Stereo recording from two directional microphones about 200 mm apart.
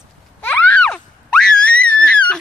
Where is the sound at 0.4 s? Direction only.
10° left (ahead or behind).